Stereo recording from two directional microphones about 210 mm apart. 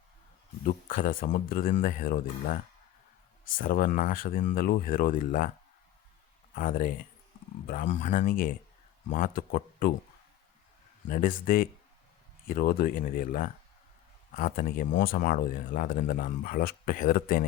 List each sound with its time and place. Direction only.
0.6 s speech: 45° left (ahead or behind)
6.5 s speech: 40° left (ahead or behind)
11.1 s speech: 40° left (ahead or behind)